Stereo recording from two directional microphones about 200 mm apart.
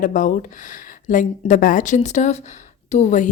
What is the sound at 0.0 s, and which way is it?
A woman's voice, 40° left (ahead or behind).